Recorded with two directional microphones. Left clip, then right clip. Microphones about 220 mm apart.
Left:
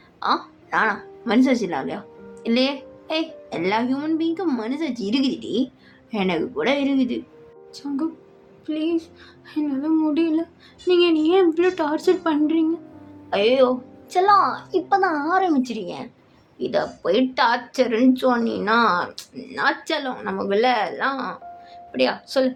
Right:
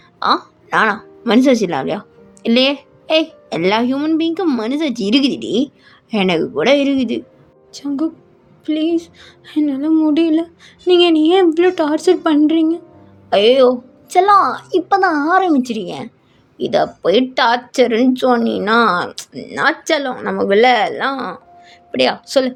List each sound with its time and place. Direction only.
0.2 s speech: 40° right (ahead or behind)